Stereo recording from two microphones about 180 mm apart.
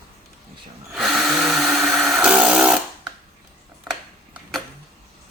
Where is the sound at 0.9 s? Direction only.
Centre (ahead or behind).